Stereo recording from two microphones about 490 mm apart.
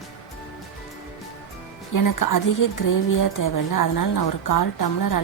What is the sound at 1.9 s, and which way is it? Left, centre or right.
A woman's voice, left.